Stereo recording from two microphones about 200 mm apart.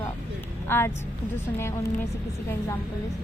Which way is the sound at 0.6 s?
10° left (ahead or behind).